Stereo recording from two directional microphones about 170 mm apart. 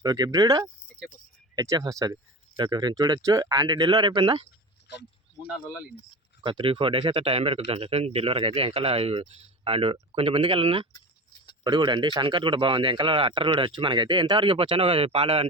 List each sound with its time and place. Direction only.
0.0 s speech: 25° right (ahead or behind)
5.5 s speech: 5° right (ahead or behind)
6.4 s speech: 30° right (ahead or behind)